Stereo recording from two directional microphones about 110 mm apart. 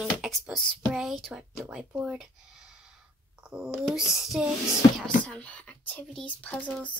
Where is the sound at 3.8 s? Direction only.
Centre (ahead or behind).